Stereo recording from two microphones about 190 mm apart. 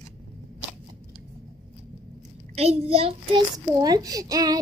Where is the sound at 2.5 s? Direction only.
35° right (ahead or behind).